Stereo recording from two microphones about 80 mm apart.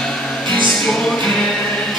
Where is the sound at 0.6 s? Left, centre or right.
Centre.